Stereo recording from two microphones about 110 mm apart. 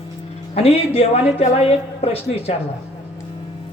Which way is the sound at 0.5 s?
65° left (ahead or behind).